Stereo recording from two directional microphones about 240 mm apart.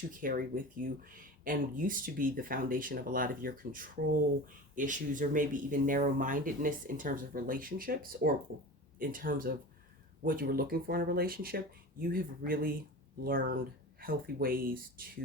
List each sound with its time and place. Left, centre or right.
0.1 s speech: right